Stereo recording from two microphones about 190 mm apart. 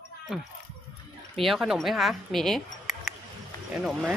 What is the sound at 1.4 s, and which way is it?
Speech, centre (ahead or behind).